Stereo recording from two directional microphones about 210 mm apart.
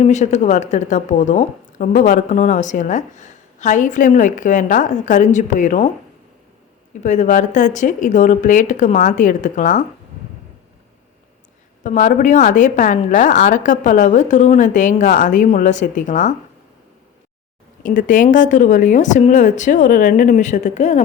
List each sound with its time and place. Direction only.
0.0 s a woman's voice: 35° left (ahead or behind)
7.0 s a woman's voice: 35° left (ahead or behind)
11.8 s a woman's voice: 35° left (ahead or behind)
17.8 s a woman's voice: 40° left (ahead or behind)